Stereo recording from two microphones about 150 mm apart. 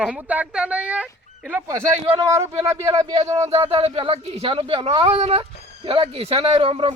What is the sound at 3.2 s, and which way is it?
Speech, 40° right (ahead or behind).